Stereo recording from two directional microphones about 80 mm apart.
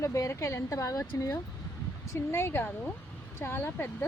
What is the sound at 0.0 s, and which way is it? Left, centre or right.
Speech, left.